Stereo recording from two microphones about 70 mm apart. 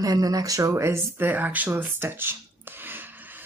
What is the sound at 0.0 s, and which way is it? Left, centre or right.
Speech, right.